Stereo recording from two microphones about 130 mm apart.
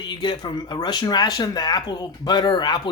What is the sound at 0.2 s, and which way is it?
Speech, 35° left (ahead or behind).